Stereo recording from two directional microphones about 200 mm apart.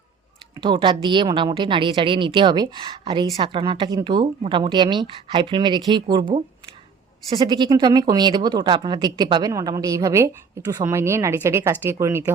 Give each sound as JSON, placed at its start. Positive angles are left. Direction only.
{"t": 0.5, "sound": "a woman's voice", "side_deg": -25}